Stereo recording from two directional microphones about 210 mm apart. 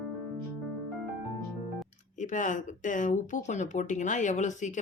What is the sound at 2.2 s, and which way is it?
Speech, 35° left (ahead or behind).